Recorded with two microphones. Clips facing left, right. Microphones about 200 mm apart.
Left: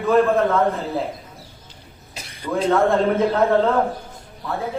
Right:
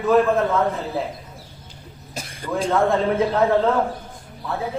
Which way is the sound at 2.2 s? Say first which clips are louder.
Right 6 dB; 45° right (ahead or behind).